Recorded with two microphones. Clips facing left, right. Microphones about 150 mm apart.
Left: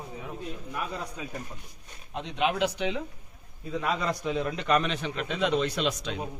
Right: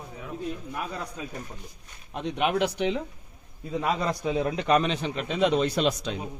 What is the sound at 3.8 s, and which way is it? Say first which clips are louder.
A man's voice: right 2 dB; 35° right (ahead or behind).